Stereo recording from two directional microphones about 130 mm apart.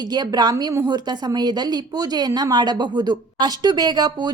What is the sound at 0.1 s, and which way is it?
Speech, 35° right (ahead or behind).